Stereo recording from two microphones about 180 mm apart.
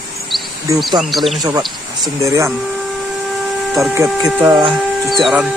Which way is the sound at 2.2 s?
15° right (ahead or behind).